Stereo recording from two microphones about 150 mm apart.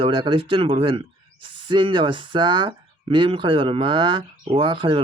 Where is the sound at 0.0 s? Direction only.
35° right (ahead or behind).